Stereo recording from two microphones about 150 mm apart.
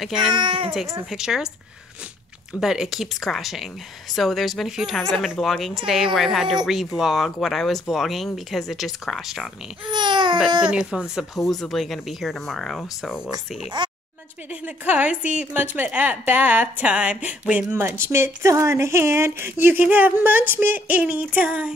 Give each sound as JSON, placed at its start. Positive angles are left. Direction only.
{"t": 0.0, "sound": "speech", "side_deg": -5}
{"t": 0.3, "sound": "a child's voice", "side_deg": -30}
{"t": 1.1, "sound": "speech", "side_deg": -5}
{"t": 2.6, "sound": "speech", "side_deg": -5}
{"t": 9.8, "sound": "babbling", "side_deg": -30}
{"t": 10.7, "sound": "speech", "side_deg": -5}
{"t": 13.8, "sound": "a woman's voice", "side_deg": -30}
{"t": 14.5, "sound": "a woman's voice", "side_deg": -10}